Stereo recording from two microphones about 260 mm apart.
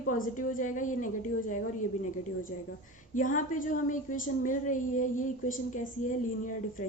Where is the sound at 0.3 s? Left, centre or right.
Left.